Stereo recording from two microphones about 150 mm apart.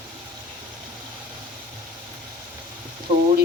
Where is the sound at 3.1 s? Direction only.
40° right (ahead or behind).